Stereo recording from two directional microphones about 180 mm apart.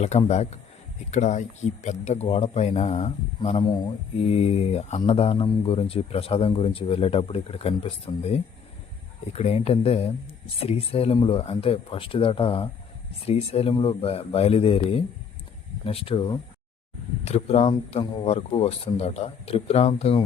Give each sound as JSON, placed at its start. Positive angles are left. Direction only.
{"t": 0.3, "sound": "speech", "side_deg": 35}
{"t": 3.6, "sound": "speech", "side_deg": 25}